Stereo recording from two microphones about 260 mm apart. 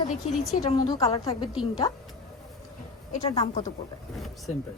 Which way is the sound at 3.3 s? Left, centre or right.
Left.